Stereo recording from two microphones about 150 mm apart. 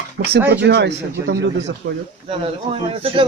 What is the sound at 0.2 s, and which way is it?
Speech, 90° right.